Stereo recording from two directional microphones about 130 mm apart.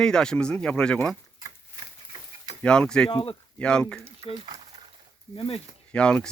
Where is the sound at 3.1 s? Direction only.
40° left (ahead or behind).